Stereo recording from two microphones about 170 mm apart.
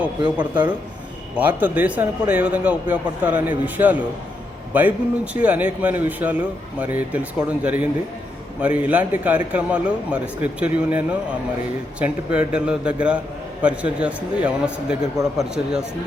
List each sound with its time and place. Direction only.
0.2 s speech: 25° right (ahead or behind)
1.4 s a man's voice: 10° right (ahead or behind)
4.7 s a man's voice: 10° right (ahead or behind)